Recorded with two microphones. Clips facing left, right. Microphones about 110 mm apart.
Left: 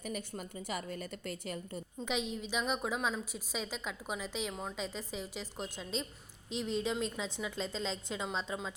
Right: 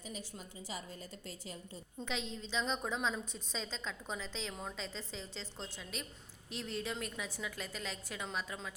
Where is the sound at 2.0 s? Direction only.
15° left (ahead or behind).